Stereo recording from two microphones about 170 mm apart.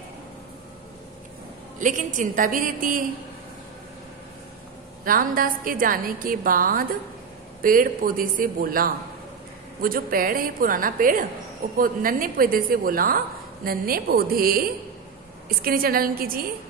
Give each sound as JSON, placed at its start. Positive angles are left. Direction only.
{"t": 1.8, "sound": "a woman's voice", "side_deg": -50}
{"t": 5.0, "sound": "a woman's voice", "side_deg": -55}